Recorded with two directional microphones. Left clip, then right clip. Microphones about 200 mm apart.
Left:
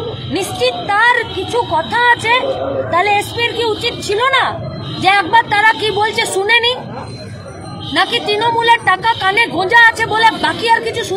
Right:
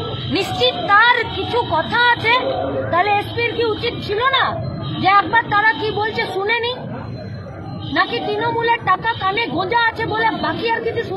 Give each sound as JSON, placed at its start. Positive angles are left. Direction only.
{"t": 0.3, "sound": "a woman's voice", "side_deg": 20}
{"t": 7.9, "sound": "a woman's voice", "side_deg": 20}